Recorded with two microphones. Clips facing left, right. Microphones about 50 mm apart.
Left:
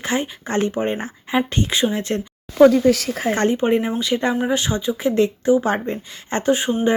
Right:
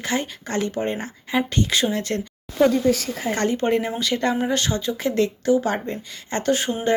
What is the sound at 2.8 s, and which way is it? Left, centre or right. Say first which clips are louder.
Speech: left 4 dB; left.